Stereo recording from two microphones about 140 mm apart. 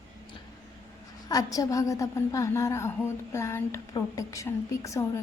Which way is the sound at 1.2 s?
25° left (ahead or behind).